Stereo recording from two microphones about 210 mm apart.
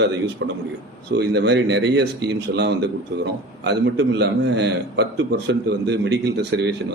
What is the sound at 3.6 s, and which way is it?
A man's voice, 55° right (ahead or behind).